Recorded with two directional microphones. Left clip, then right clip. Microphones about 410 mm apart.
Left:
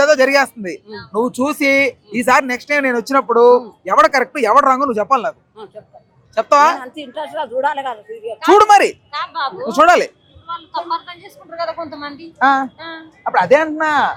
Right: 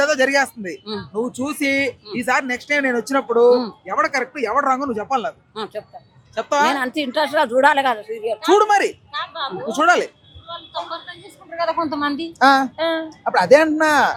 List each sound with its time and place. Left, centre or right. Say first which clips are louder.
0.0 s a man's voice: left 5 dB; centre
6.7 s a woman's voice: right 6 dB; right
8.5 s speech: left 7 dB; left
9.6 s speech: left 5 dB; left
10.5 s a man's voice: left 6 dB; left
11.7 s a woman's voice: right 5 dB; right
12.4 s a man's voice: even; centre
12.7 s child singing: right 11 dB; right
13.2 s a man's voice: left 1 dB; centre